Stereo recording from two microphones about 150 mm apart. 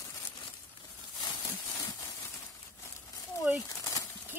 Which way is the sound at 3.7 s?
20° left (ahead or behind).